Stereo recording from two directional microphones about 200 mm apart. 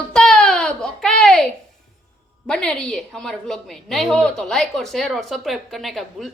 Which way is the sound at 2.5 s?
5° left (ahead or behind).